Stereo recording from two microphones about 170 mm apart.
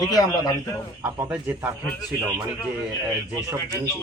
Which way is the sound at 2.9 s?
20° right (ahead or behind).